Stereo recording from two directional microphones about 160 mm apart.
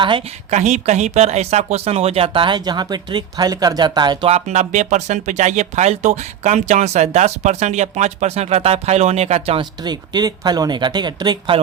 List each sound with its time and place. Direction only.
0.0 s a woman's voice: 35° right (ahead or behind)
4.3 s speech: 45° right (ahead or behind)
9.6 s speech: 25° right (ahead or behind)